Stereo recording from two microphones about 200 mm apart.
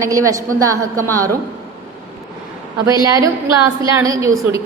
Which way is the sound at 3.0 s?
15° right (ahead or behind).